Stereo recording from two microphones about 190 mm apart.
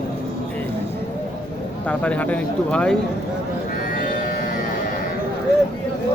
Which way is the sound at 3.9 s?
50° left (ahead or behind).